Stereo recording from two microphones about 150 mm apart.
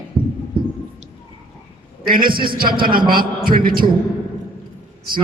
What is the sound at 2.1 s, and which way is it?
A man's voice, 75° right (ahead or behind).